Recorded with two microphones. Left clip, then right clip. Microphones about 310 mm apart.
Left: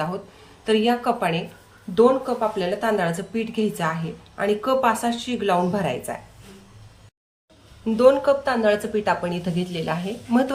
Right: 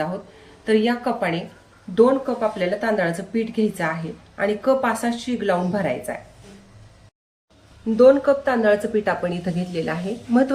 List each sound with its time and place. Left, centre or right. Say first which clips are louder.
0.6 s speech: even; centre
7.9 s speech: right 2 dB; centre